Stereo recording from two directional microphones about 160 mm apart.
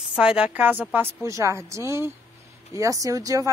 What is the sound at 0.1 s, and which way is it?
A woman's voice, 5° right (ahead or behind).